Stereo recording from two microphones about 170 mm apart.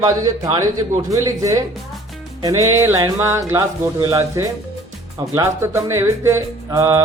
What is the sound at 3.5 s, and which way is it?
Speech, 20° right (ahead or behind).